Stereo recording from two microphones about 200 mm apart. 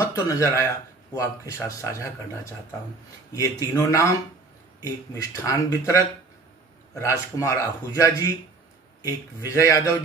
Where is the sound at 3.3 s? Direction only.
15° left (ahead or behind).